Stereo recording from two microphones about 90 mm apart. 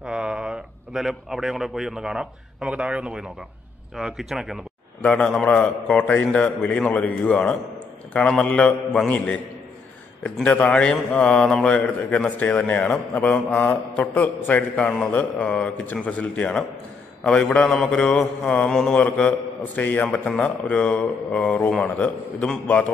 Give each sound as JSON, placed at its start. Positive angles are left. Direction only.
{"t": 0.0, "sound": "a man's voice", "side_deg": -10}
{"t": 5.0, "sound": "a man's voice", "side_deg": 10}